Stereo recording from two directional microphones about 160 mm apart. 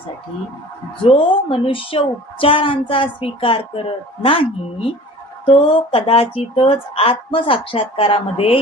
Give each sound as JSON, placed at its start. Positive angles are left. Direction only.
{"t": 1.0, "sound": "a woman's voice", "side_deg": 35}